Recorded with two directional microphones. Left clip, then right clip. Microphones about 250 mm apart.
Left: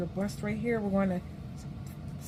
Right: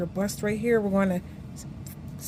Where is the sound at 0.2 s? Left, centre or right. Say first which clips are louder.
Right 9 dB; right.